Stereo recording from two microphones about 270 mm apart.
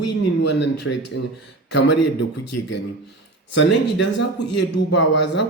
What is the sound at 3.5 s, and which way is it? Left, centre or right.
Speech, left.